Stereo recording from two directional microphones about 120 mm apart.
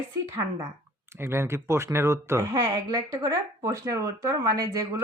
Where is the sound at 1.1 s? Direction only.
20° right (ahead or behind).